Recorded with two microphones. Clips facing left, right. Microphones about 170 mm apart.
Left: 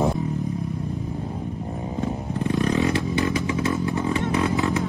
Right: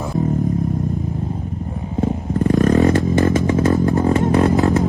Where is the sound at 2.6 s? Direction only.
40° right (ahead or behind).